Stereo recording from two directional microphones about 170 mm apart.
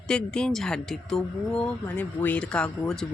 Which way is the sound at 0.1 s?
5° left (ahead or behind).